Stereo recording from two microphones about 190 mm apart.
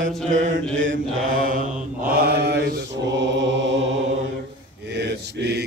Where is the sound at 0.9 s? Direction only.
45° right (ahead or behind).